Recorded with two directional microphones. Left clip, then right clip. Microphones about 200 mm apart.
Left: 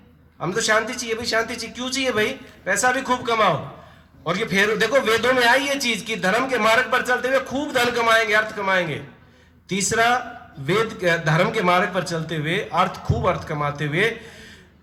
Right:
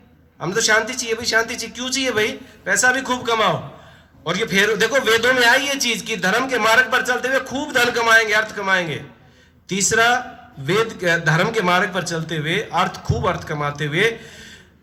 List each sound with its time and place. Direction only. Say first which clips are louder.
0.3 s a man's voice: right 3 dB; 20° right (ahead or behind)